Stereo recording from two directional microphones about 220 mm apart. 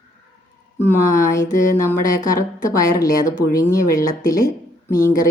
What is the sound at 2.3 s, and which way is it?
Speech, 40° left (ahead or behind).